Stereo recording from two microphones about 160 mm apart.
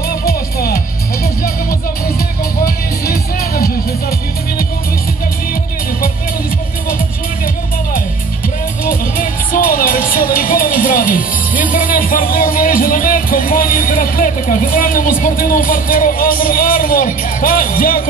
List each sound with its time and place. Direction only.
0.2 s music: 70° left (ahead or behind)
8.8 s music: 60° left (ahead or behind)